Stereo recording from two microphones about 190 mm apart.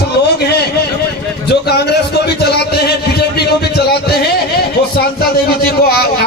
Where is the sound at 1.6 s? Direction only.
60° left (ahead or behind).